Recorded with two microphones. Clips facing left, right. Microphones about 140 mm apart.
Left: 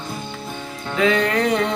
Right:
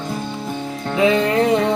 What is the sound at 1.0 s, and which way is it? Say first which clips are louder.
Music: right 3 dB; 20° right (ahead or behind).